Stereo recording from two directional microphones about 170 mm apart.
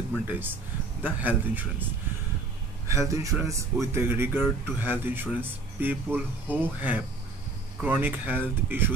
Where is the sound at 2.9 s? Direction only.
15° right (ahead or behind).